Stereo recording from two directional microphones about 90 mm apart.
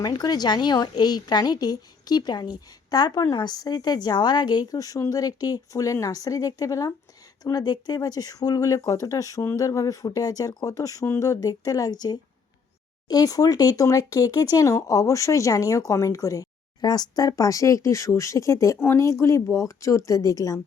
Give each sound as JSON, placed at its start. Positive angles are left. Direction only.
{"t": 0.0, "sound": "a woman's voice", "side_deg": 50}